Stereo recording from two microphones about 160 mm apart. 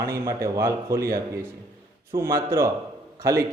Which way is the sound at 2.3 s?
15° right (ahead or behind).